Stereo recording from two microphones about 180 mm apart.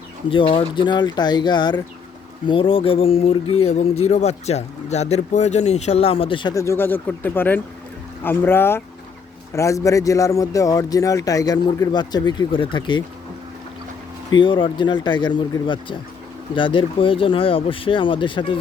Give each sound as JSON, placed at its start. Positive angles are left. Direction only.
{"t": 0.3, "sound": "a man's voice", "side_deg": 30}
{"t": 14.3, "sound": "a man's voice", "side_deg": 25}